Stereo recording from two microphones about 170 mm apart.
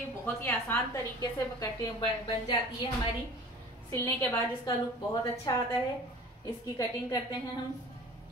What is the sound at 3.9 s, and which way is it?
A woman's voice, 15° left (ahead or behind).